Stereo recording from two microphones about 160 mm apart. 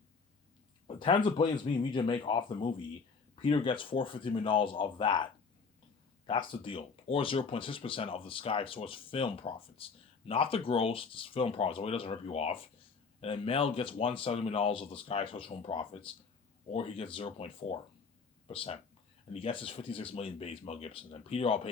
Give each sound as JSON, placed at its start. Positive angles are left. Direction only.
{"t": 0.9, "sound": "speech", "side_deg": 30}